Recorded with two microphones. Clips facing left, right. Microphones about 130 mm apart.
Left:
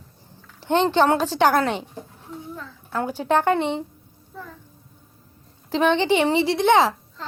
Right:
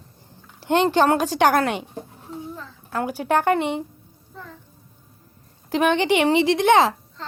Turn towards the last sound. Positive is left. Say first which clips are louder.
# right 1 dB
turn(degrees=-15)  # may be behind; listen again after turning